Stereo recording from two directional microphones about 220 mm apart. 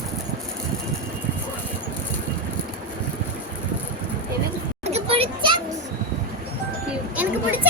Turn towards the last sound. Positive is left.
turn(degrees=-10)  # may be behind; listen again after turning